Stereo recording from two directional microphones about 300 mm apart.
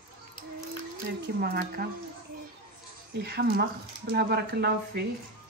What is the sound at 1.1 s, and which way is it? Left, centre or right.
Speech, right.